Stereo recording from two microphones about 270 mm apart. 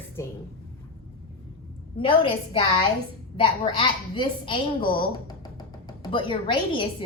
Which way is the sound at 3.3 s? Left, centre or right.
Centre.